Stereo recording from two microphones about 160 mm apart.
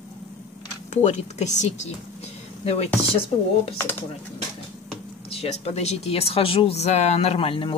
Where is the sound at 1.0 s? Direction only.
45° left (ahead or behind).